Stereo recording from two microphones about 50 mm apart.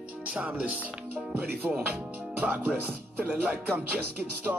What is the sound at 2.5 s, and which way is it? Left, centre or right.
Music, right.